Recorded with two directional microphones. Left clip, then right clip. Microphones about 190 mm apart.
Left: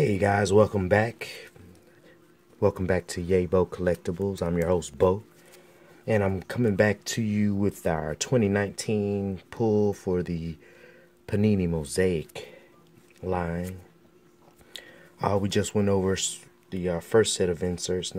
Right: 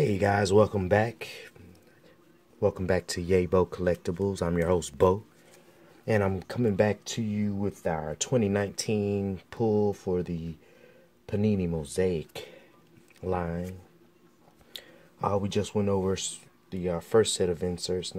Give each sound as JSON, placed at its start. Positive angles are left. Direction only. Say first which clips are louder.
{"t": 0.0, "sound": "speech", "louder": "left 2 dB", "side_deg": 5}
{"t": 2.6, "sound": "speech", "louder": "left 2 dB", "side_deg": 15}
{"t": 2.9, "sound": "speech", "louder": "left 1 dB", "side_deg": 0}
{"t": 7.1, "sound": "speech", "louder": "left 4 dB", "side_deg": 25}
{"t": 8.2, "sound": "speech", "louder": "left 1 dB", "side_deg": 15}
{"t": 9.6, "sound": "speech", "louder": "left 2 dB", "side_deg": 10}
{"t": 12.3, "sound": "speech", "louder": "left 1 dB", "side_deg": 0}
{"t": 14.7, "sound": "a sound", "louder": "left 1 dB", "side_deg": 5}
{"t": 15.1, "sound": "speech", "louder": "left 2 dB", "side_deg": 20}